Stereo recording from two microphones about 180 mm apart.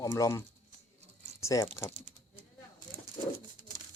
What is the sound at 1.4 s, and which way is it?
Speech, 15° left (ahead or behind).